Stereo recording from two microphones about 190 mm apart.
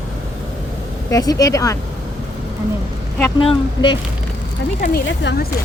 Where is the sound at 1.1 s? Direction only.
20° left (ahead or behind).